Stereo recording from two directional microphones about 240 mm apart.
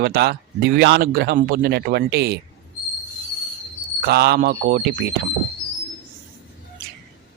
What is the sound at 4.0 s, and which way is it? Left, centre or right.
Speech, right.